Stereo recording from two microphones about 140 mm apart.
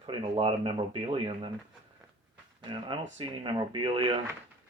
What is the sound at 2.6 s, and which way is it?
Speech, 35° right (ahead or behind).